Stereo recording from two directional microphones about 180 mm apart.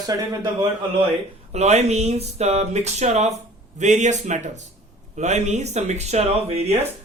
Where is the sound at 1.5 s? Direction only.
40° right (ahead or behind).